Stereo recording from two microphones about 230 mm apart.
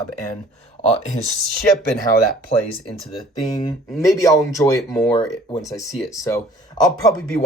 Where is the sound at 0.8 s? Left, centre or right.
Left.